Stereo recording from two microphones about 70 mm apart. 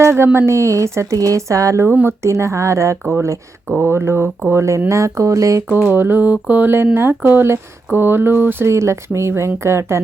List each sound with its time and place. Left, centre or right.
0.0 s speech: right
5.7 s speech: right
6.3 s a sound: right
6.9 s speech: right